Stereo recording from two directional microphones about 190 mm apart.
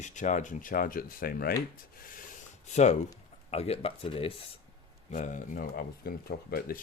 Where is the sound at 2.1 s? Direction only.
40° left (ahead or behind).